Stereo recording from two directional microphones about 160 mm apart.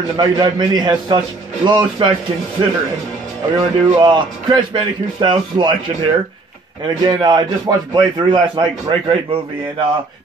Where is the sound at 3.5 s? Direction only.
35° right (ahead or behind).